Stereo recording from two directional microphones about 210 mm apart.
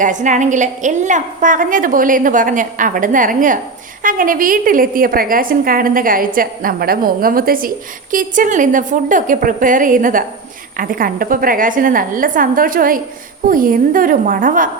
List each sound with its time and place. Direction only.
0.0 s a woman's voice: 35° right (ahead or behind)